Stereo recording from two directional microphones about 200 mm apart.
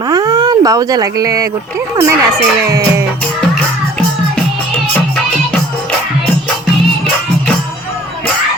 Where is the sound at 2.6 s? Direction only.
15° right (ahead or behind).